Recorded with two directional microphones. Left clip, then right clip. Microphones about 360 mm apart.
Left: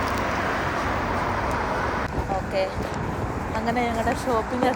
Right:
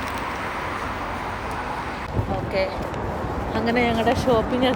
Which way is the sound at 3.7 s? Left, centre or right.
Centre.